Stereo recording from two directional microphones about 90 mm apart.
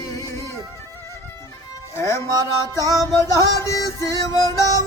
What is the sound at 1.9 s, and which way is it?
Music, 30° left (ahead or behind).